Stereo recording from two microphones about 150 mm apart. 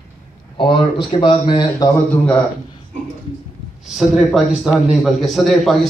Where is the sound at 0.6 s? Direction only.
35° left (ahead or behind).